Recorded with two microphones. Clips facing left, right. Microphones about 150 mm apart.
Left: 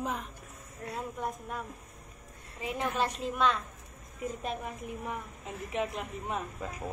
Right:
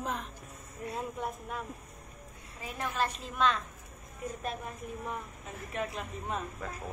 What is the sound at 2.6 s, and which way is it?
Speech, 15° left (ahead or behind).